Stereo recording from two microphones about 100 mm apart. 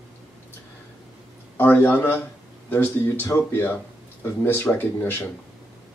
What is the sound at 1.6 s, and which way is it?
Speech, 20° left (ahead or behind).